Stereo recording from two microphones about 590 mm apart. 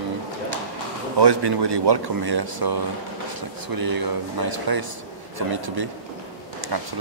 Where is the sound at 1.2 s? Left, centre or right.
Right.